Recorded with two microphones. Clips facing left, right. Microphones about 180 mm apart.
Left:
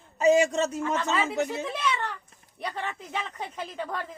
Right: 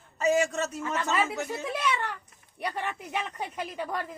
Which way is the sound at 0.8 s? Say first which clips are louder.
Left 1 dB; 10° right (ahead or behind).